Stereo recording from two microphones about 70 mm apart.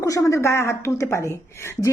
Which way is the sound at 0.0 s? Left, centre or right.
Left.